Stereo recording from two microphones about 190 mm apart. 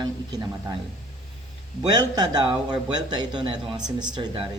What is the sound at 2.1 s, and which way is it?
Speech, 20° right (ahead or behind).